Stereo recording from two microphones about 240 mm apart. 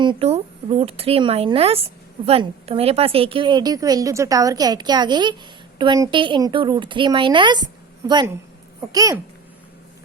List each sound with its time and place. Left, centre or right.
0.0 s speech: right